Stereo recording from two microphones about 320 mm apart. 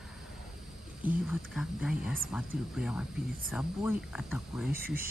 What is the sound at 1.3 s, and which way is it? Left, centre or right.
Speech, centre.